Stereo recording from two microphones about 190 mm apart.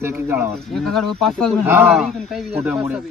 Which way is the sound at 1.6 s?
10° right (ahead or behind).